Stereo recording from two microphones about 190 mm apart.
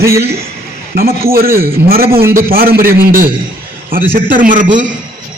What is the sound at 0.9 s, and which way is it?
A man's voice, 50° right (ahead or behind).